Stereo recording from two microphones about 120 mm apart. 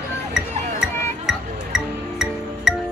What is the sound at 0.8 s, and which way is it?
Music, 5° right (ahead or behind).